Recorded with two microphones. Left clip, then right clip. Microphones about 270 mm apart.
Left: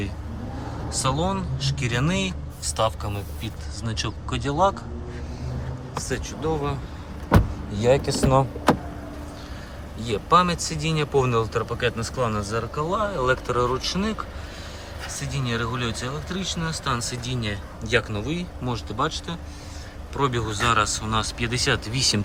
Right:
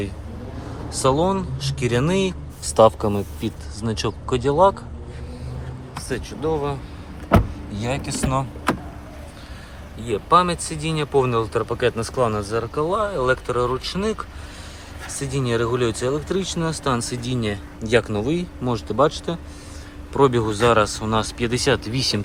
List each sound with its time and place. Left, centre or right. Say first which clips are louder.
0.9 s speech: right 6 dB; centre
6.0 s speech: right 2 dB; centre
10.0 s speech: right 2 dB; centre